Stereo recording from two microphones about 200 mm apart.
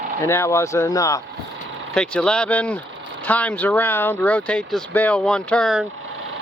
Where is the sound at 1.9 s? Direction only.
5° left (ahead or behind).